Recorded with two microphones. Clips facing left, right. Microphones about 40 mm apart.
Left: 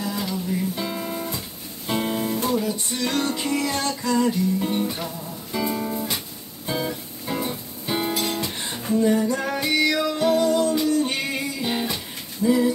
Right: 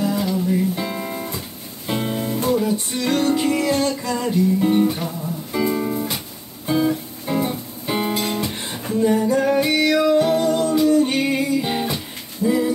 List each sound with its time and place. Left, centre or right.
0.3 s music: centre
1.9 s music: centre
2.5 s music: centre
8.1 s guitar: right
9.0 s music: centre